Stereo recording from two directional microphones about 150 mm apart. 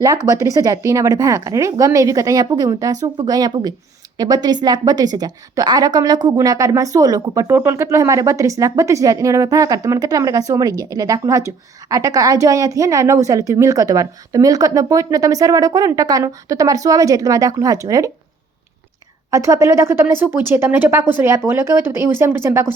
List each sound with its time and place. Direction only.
0.3 s a woman's voice: 20° right (ahead or behind)
19.3 s a woman's voice: 20° right (ahead or behind)